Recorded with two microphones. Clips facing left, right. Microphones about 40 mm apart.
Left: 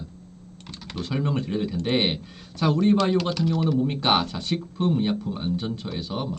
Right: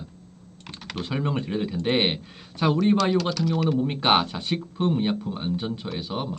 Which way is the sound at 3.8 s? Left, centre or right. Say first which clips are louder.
Right 1 dB; right.